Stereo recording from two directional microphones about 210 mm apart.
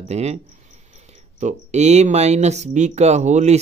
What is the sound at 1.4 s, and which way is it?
Speech, 35° right (ahead or behind).